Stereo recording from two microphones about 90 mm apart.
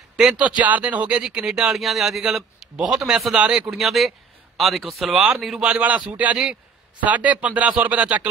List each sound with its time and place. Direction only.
0.2 s speech: 10° right (ahead or behind)